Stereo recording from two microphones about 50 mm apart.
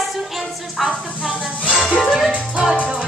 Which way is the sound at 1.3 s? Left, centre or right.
Centre.